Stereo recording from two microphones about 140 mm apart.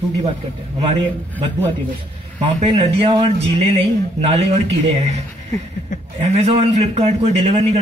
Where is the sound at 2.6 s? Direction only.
40° right (ahead or behind).